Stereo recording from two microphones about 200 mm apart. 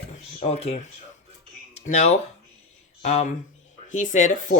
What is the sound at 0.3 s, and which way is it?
Speech, 35° left (ahead or behind).